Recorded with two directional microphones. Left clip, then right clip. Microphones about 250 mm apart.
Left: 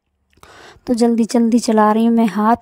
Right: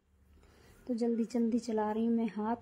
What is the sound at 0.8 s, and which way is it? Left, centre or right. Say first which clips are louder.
Speech: left 18 dB; left.